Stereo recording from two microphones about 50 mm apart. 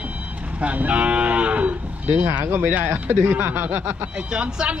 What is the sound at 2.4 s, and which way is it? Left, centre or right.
Speech, right.